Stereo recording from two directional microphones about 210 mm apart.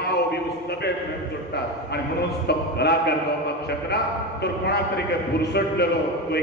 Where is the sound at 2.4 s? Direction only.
50° left (ahead or behind).